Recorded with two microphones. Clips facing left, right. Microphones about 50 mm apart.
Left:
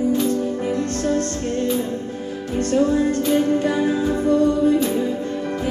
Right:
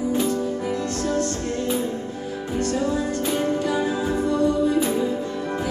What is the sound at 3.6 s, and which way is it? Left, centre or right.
Music, left.